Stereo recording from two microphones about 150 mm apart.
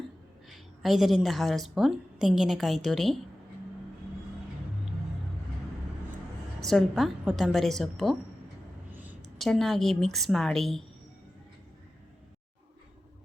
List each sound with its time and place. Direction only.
0.4 s a woman's voice: centre (ahead or behind)
6.6 s a woman's voice: centre (ahead or behind)
9.2 s a woman's voice: centre (ahead or behind)